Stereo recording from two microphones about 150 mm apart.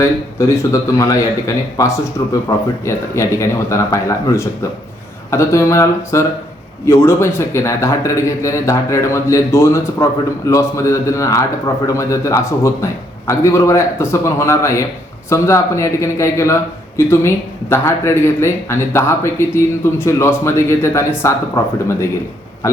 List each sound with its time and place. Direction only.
0.0 s a man's voice: 20° left (ahead or behind)